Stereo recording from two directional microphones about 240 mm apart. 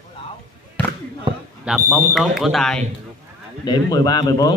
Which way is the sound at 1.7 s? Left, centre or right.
Centre.